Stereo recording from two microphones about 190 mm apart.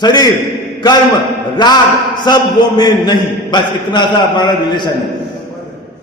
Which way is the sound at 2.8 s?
20° left (ahead or behind).